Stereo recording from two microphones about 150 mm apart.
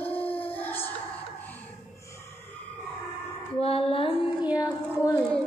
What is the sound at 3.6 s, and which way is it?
Music, 40° left (ahead or behind).